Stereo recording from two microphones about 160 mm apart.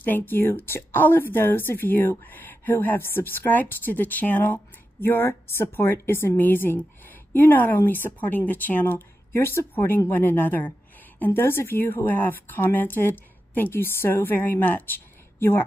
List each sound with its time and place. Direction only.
0.0 s a woman's voice: 10° left (ahead or behind)